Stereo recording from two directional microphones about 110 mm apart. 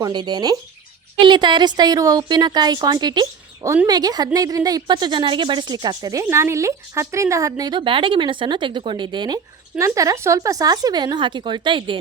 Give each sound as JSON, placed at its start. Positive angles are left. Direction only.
{"t": 0.1, "sound": "speech", "side_deg": -45}
{"t": 6.2, "sound": "speech", "side_deg": -25}
{"t": 7.8, "sound": "speech", "side_deg": -50}
{"t": 9.7, "sound": "speech", "side_deg": -30}